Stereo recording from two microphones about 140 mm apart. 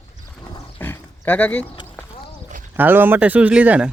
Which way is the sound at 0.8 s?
15° left (ahead or behind).